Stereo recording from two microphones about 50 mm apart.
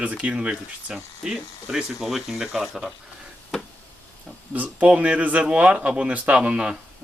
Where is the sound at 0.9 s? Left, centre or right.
Centre.